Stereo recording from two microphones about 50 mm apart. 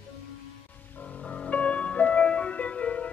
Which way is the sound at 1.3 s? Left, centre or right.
Left.